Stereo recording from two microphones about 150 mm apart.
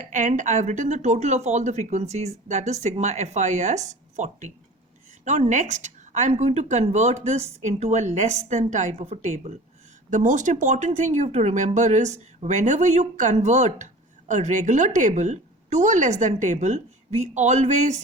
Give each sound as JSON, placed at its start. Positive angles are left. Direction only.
{"t": 0.0, "sound": "speech", "side_deg": -55}